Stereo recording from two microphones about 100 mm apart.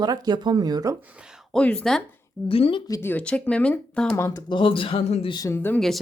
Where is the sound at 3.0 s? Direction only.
15° left (ahead or behind).